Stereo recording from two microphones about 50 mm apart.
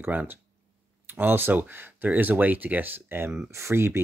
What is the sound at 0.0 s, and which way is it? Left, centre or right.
Speech, right.